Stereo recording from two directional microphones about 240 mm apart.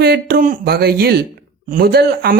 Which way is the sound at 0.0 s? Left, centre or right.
Right.